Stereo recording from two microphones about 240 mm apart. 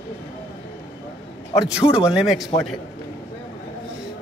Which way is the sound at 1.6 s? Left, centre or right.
Centre.